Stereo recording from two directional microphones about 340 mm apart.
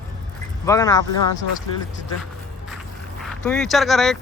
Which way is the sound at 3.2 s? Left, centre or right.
Centre.